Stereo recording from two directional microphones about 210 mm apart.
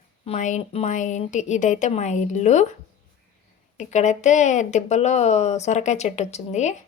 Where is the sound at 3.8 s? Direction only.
35° left (ahead or behind).